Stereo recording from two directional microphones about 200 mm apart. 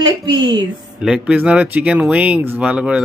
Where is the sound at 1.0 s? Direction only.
5° right (ahead or behind).